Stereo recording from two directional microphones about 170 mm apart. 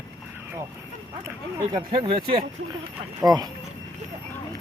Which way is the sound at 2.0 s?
30° right (ahead or behind).